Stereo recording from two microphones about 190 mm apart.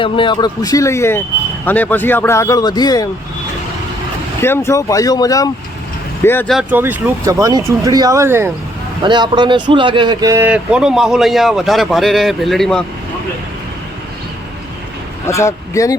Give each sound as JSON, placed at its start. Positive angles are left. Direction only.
{"t": 0.0, "sound": "speech", "side_deg": 25}
{"t": 4.4, "sound": "speech", "side_deg": 15}
{"t": 6.5, "sound": "speech", "side_deg": -5}
{"t": 9.0, "sound": "speech", "side_deg": -25}
{"t": 15.3, "sound": "speech", "side_deg": 15}